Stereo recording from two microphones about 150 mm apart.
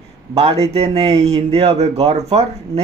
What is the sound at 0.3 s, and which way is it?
Speech, 40° right (ahead or behind).